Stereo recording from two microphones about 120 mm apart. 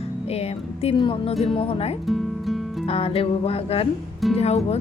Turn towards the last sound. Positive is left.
turn(degrees=65)  # may be behind; listen again after turning